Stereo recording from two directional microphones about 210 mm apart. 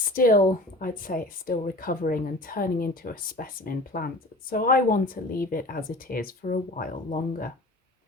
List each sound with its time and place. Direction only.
0.1 s speech: 40° left (ahead or behind)